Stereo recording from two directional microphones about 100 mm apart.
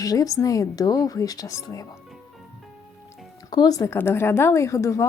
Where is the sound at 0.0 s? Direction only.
35° left (ahead or behind).